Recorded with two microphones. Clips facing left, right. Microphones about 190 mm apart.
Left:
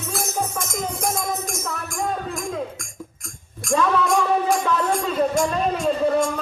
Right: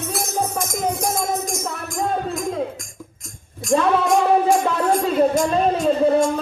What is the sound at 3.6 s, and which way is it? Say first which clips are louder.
Music: right 3 dB; 25° right (ahead or behind).